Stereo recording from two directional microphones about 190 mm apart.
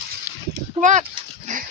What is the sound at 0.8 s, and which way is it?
Speech, 40° right (ahead or behind).